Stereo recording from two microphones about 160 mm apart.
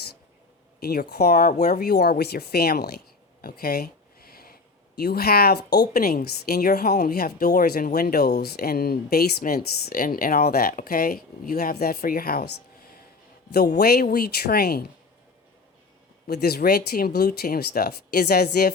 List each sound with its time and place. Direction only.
0.8 s speech: 80° left
1.3 s speech: 50° left (ahead or behind)
1.8 s speech: 75° left (ahead or behind)
3.4 s a sound: 75° left (ahead or behind)
4.9 s a woman's voice: 75° left (ahead or behind)
13.7 s a woman's voice: 75° left (ahead or behind)
16.2 s speech: 80° left